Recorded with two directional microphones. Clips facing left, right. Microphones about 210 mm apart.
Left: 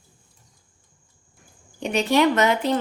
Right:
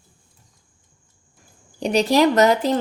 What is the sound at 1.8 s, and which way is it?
Speech, 35° right (ahead or behind).